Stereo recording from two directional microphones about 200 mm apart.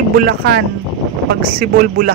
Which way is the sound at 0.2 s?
50° right (ahead or behind).